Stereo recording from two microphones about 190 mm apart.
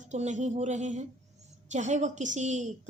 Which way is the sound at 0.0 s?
40° right (ahead or behind).